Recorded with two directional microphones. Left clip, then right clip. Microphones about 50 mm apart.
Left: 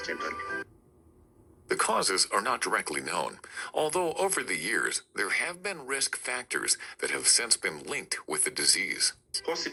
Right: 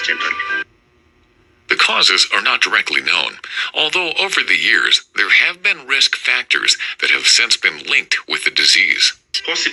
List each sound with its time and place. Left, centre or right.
0.0 s speech: right